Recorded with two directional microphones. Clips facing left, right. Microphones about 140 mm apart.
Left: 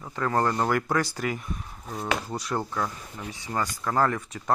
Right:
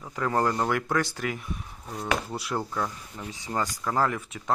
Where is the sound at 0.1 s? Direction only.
10° right (ahead or behind).